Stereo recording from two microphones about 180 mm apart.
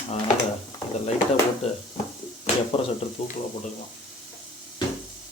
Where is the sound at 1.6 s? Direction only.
35° left (ahead or behind).